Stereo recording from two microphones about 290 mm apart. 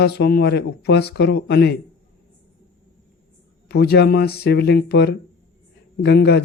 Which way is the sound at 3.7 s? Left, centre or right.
Left.